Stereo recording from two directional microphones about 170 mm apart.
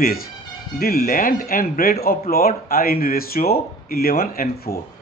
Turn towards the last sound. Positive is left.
turn(degrees=60)  # may be behind; listen again after turning